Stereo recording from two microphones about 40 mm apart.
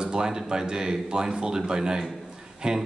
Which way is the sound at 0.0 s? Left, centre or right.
Centre.